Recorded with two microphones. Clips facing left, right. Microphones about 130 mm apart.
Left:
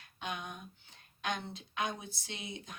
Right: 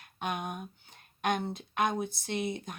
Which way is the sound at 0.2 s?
50° right (ahead or behind).